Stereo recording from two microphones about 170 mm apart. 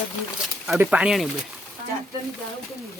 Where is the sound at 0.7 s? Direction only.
5° right (ahead or behind).